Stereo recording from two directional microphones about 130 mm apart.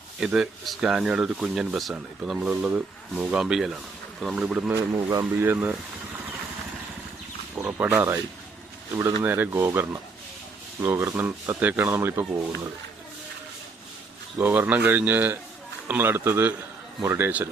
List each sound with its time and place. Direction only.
0.2 s speech: 5° right (ahead or behind)
4.7 s speech: 20° right (ahead or behind)
7.5 s speech: 15° right (ahead or behind)
9.2 s speech: 15° right (ahead or behind)
14.3 s speech: 15° right (ahead or behind)